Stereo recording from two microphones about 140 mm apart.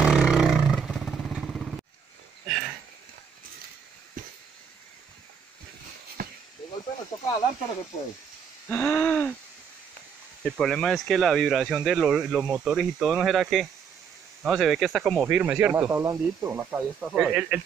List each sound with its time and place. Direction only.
0.0 s vehicle: 5° right (ahead or behind)
2.4 s a sound: centre (ahead or behind)
6.2 s a sound: 90° right
8.6 s hoot: 10° left (ahead or behind)
10.4 s speech: centre (ahead or behind); by 16.8 s 20° right (ahead or behind)
17.0 s speech: 5° right (ahead or behind)